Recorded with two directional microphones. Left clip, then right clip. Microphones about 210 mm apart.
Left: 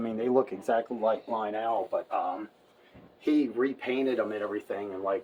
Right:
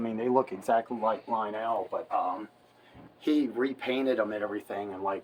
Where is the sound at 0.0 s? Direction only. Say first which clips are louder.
Even; 20° right (ahead or behind).